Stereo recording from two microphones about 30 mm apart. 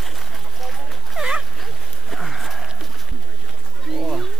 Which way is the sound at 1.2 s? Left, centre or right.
Right.